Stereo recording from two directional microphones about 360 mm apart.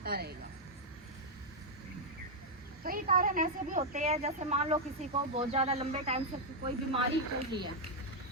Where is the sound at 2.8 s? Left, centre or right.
Right.